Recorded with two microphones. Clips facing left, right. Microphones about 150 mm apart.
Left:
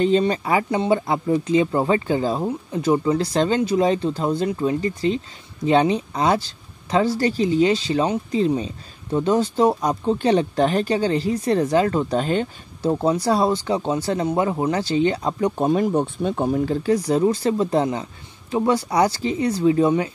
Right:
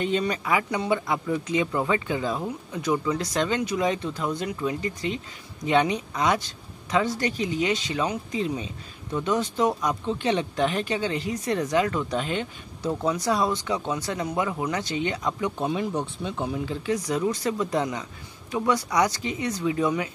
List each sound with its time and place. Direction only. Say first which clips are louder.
0.0 s speech: left 7 dB; 30° left (ahead or behind)
15.5 s speech: left 8 dB; 45° left (ahead or behind)